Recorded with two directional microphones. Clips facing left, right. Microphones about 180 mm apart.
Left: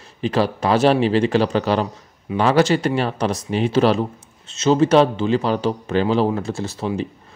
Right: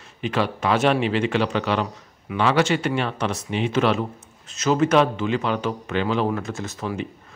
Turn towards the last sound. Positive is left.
turn(degrees=30)  # may be behind; listen again after turning